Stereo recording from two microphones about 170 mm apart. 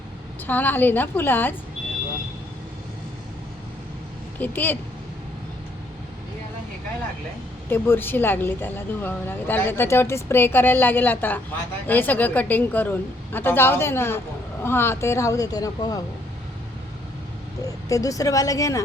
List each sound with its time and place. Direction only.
0.4 s speech: 10° left (ahead or behind)
4.4 s speech: 10° left (ahead or behind)
7.7 s speech: 10° left (ahead or behind)
17.6 s speech: 20° left (ahead or behind)